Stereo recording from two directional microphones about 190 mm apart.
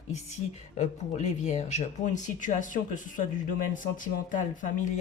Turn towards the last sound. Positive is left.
turn(degrees=40)  # may be behind; listen again after turning